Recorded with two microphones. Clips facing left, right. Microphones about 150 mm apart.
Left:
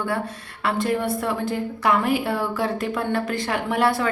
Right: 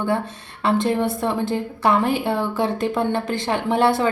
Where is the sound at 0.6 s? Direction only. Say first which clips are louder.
Right 3 dB; 25° right (ahead or behind).